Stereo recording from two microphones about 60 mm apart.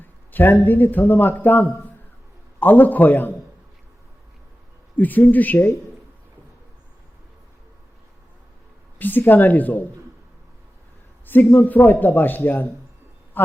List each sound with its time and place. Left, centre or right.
0.3 s a man's voice: left
4.9 s speech: left
9.0 s speech: left
11.3 s a man's voice: left
13.4 s a sound: left